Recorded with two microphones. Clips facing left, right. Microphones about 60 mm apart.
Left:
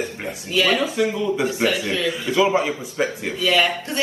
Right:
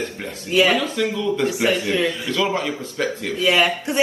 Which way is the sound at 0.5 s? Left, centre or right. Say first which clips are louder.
Right 3 dB; right.